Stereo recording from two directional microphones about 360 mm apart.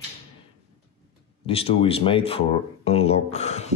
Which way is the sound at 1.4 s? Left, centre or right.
Centre.